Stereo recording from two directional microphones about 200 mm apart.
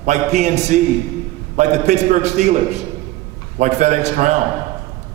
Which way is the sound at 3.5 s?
35° right (ahead or behind).